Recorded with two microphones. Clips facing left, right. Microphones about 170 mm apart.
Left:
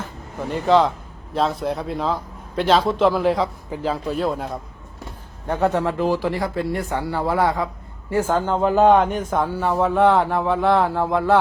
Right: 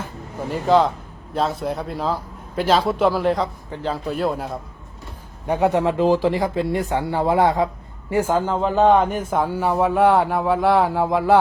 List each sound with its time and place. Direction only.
0.4 s a man's voice: centre (ahead or behind)
5.5 s a man's voice: 15° right (ahead or behind)